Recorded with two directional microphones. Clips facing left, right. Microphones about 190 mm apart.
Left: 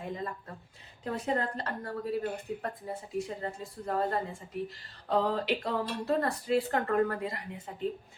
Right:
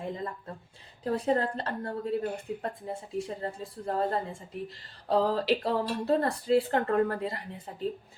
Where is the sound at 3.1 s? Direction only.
30° right (ahead or behind).